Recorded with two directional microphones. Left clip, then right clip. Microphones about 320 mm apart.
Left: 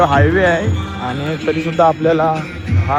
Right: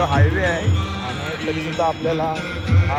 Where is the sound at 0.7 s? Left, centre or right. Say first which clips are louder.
Left 4 dB; centre.